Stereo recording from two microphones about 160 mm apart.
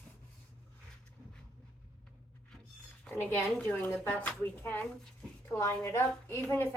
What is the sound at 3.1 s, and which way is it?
A woman's voice, 15° left (ahead or behind).